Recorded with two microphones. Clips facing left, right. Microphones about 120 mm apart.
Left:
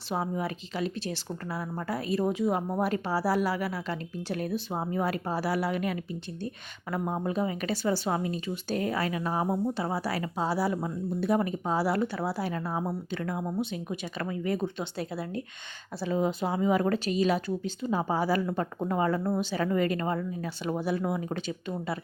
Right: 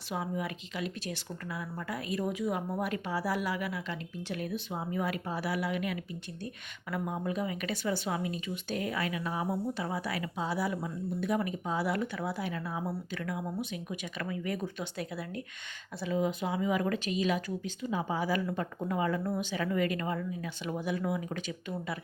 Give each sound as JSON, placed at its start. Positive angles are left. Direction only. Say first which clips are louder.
{"t": 0.1, "sound": "a woman's voice", "louder": "left 4 dB", "side_deg": 35}